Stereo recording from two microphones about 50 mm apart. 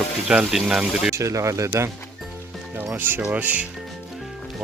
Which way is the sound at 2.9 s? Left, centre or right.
Right.